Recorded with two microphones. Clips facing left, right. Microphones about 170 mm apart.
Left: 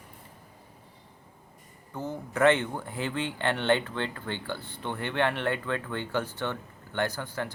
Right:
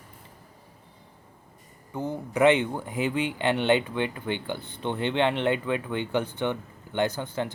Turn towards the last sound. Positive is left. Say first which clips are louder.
# right 4 dB
turn(degrees=-20)  # may be behind; listen again after turning